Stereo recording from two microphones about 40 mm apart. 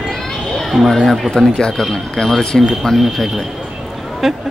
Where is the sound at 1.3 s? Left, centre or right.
Centre.